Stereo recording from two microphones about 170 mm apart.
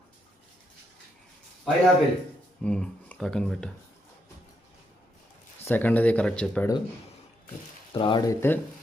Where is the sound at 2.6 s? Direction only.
5° left (ahead or behind).